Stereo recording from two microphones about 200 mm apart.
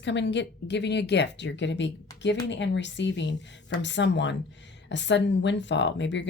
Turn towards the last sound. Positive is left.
turn(degrees=65)  # may be behind; listen again after turning